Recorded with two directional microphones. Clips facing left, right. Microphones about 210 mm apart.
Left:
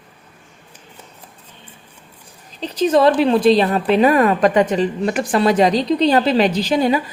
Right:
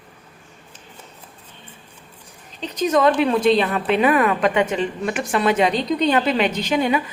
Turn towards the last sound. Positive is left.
turn(degrees=35)  # may be behind; listen again after turning